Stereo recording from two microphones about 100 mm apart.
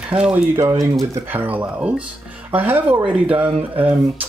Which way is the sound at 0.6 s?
35° right (ahead or behind).